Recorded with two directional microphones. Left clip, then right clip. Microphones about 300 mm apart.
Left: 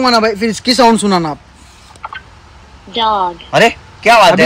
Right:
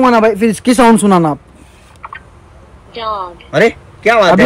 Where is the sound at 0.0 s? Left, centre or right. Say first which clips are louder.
Right 2 dB; right.